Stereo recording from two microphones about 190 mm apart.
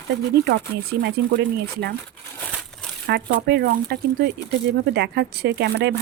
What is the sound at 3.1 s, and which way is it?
A woman's voice, 60° right (ahead or behind).